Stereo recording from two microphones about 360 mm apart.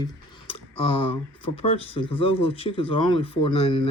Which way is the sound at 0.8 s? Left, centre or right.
Centre.